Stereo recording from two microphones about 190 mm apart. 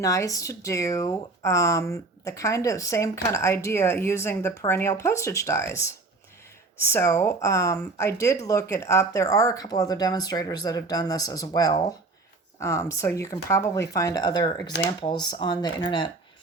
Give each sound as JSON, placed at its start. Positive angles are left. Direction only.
{"t": 0.0, "sound": "speech", "side_deg": 15}
{"t": 6.9, "sound": "speech", "side_deg": 15}